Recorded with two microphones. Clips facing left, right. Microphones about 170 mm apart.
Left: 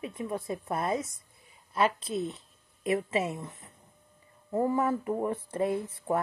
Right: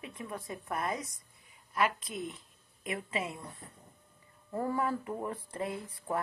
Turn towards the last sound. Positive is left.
turn(degrees=25)  # may be behind; listen again after turning